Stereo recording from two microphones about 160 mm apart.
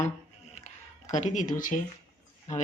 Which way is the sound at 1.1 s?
50° left (ahead or behind).